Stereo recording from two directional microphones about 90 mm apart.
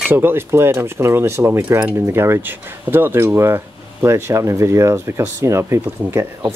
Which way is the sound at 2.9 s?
25° right (ahead or behind).